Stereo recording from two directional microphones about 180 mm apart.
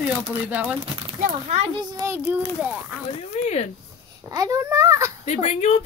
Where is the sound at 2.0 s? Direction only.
10° right (ahead or behind).